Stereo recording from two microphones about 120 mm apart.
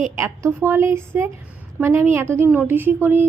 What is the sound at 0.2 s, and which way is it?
A woman's voice, 25° right (ahead or behind).